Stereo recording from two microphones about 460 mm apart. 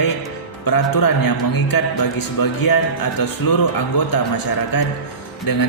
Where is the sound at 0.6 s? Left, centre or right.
Left.